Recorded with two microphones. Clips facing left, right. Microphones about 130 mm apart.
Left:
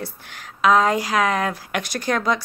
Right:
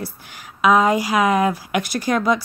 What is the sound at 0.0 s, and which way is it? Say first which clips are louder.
A woman's voice: right 1 dB; 10° right (ahead or behind).